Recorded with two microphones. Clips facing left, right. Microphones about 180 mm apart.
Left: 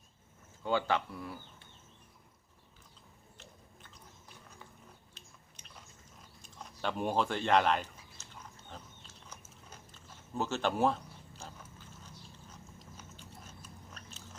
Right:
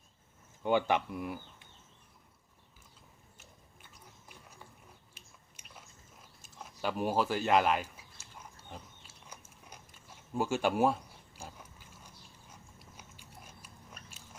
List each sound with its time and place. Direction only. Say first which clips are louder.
0.6 s speech: right 3 dB; 15° right (ahead or behind)
3.3 s biting: left 3 dB; 10° right (ahead or behind)
5.1 s biting: left 1 dB; 5° right (ahead or behind)
6.4 s a sound: right 1 dB; 5° right (ahead or behind)